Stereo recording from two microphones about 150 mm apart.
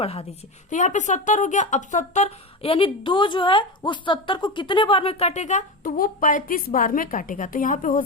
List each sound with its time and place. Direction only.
0.0 s a woman's voice: 40° left (ahead or behind)
0.7 s speech: 55° left (ahead or behind)